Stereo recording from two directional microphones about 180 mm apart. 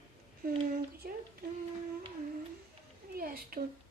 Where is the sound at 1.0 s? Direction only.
55° right (ahead or behind).